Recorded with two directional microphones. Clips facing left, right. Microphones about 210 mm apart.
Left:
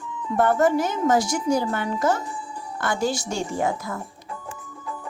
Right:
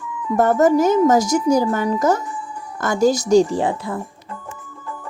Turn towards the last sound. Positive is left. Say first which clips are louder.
# right 4 dB
turn(degrees=-30)  # may be behind; listen again after turning